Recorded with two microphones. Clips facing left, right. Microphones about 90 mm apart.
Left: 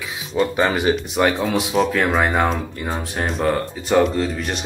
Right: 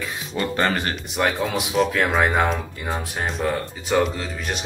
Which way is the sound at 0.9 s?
Centre (ahead or behind).